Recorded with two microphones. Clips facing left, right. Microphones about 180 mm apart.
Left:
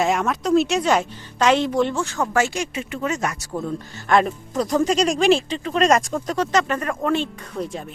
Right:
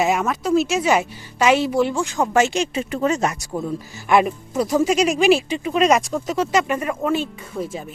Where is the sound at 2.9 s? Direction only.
35° right (ahead or behind).